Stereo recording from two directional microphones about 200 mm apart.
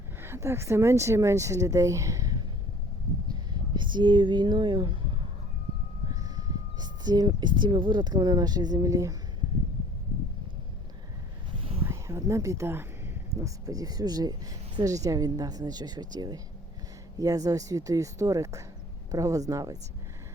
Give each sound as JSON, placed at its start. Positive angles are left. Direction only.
{"t": 0.2, "sound": "speech", "side_deg": -15}
{"t": 6.1, "sound": "speech", "side_deg": -20}
{"t": 11.9, "sound": "speech", "side_deg": -15}